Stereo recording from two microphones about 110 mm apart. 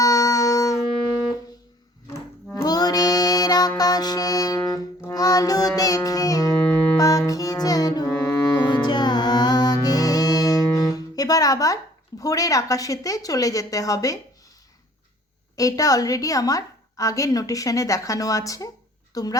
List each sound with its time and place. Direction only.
0.0 s a sound: 30° left (ahead or behind)
2.6 s music: 35° left (ahead or behind)
12.2 s a woman's voice: 30° left (ahead or behind)
15.5 s a woman's voice: 35° left (ahead or behind)